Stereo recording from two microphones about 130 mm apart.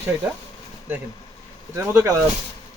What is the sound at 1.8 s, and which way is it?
Speech, 20° right (ahead or behind).